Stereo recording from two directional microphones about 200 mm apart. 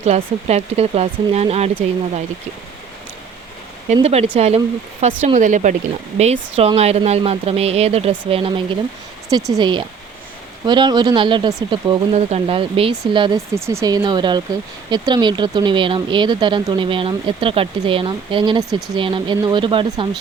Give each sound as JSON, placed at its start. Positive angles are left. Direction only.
{"t": 0.0, "sound": "speech", "side_deg": -35}
{"t": 3.9, "sound": "speech", "side_deg": -30}